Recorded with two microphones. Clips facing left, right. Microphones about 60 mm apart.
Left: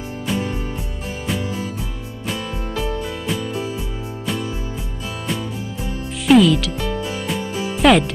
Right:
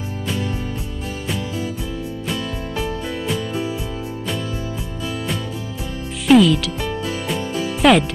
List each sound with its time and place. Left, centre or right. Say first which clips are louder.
6.2 s speech: even; centre
7.7 s music: even; centre